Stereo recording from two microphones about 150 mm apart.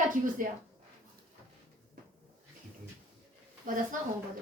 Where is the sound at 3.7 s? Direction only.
65° right (ahead or behind).